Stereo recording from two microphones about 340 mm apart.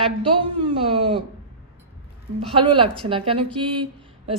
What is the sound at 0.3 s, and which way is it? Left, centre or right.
Speech, centre.